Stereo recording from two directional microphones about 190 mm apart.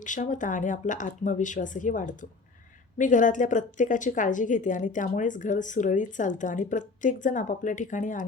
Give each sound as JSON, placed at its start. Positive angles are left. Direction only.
{"t": 0.0, "sound": "a woman's voice", "side_deg": 40}